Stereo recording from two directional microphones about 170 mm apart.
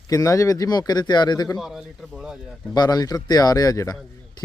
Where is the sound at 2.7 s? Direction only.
25° left (ahead or behind).